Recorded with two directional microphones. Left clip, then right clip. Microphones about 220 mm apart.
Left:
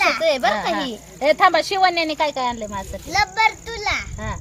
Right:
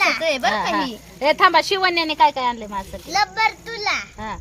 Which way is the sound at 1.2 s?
25° right (ahead or behind).